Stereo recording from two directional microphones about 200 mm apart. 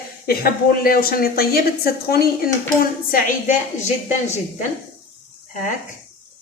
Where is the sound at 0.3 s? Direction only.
50° left (ahead or behind).